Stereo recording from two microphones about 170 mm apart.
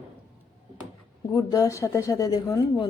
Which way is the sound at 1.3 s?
20° left (ahead or behind).